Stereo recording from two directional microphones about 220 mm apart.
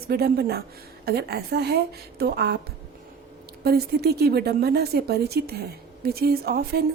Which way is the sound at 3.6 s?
45° right (ahead or behind).